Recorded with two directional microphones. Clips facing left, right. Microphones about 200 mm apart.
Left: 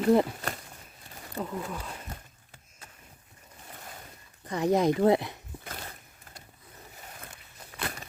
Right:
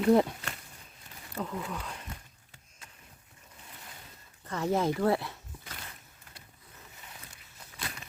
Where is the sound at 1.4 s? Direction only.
5° left (ahead or behind).